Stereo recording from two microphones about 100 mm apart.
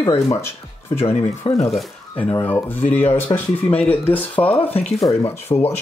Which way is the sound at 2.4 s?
20° left (ahead or behind).